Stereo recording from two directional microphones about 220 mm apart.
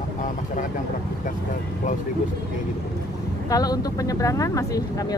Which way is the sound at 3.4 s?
15° left (ahead or behind).